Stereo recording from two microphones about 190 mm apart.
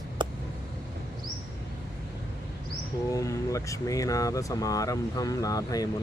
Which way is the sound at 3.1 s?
15° left (ahead or behind).